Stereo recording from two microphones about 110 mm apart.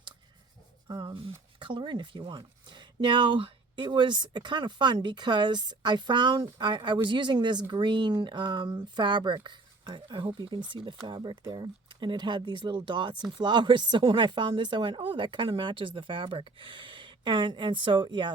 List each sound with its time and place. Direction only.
0.9 s speech: 45° right (ahead or behind)